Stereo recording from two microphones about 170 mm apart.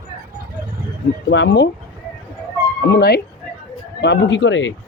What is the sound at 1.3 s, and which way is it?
Speech, 90° left.